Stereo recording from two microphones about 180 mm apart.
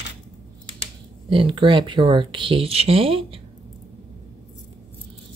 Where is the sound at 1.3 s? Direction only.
30° right (ahead or behind).